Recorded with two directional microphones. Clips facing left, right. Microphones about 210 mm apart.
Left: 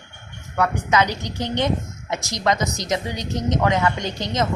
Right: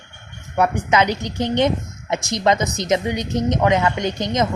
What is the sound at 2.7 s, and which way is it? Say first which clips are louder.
A woman's voice: right 5 dB; 20° right (ahead or behind).